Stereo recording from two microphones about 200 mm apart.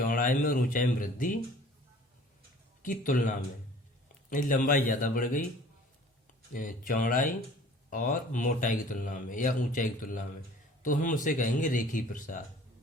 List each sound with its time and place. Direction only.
0.0 s speech: 45° left (ahead or behind)
2.8 s a man's voice: 40° left (ahead or behind)
6.5 s a man's voice: 40° left (ahead or behind)